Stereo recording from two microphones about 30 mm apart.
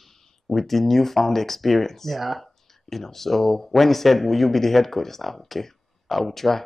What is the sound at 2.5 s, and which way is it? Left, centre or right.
Speech, centre.